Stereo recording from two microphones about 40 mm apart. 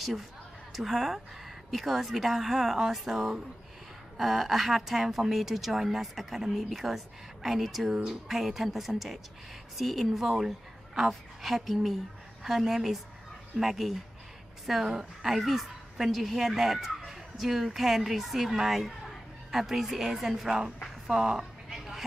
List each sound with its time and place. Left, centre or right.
0.0 s a man's voice: centre
14.9 s speech: centre
15.3 s speech: centre
21.1 s a sound: centre